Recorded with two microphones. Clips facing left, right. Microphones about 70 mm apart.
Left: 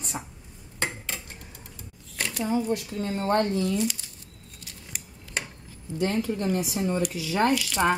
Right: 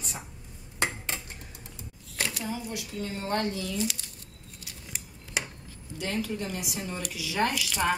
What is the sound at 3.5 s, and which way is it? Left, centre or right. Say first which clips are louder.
Speech: left 8 dB; left.